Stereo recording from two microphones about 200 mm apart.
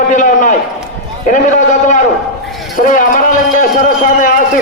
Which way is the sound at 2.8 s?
40° left (ahead or behind).